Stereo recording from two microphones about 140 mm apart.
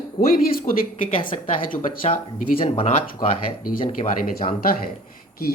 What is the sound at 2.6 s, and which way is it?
Speech, 45° left (ahead or behind).